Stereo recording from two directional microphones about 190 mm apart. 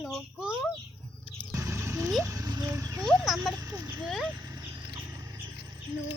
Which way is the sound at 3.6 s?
20° right (ahead or behind).